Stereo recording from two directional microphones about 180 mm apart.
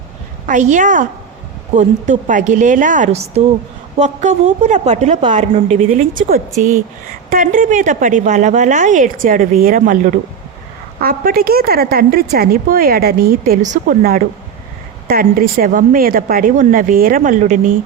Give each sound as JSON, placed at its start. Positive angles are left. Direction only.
{"t": 0.4, "sound": "a woman's voice", "side_deg": -45}
{"t": 15.1, "sound": "a woman's voice", "side_deg": -55}